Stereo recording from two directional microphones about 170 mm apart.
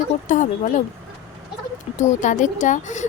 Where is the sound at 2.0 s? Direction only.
45° left (ahead or behind).